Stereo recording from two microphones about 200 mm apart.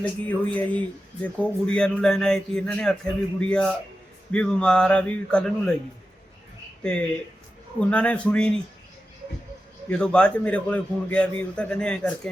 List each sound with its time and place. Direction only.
0.0 s speech: 5° left (ahead or behind)
6.8 s speech: 5° left (ahead or behind)
9.9 s speech: 5° left (ahead or behind)